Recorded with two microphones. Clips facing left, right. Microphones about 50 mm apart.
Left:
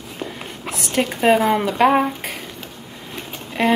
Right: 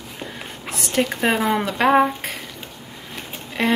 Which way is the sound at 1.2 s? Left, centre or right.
Centre.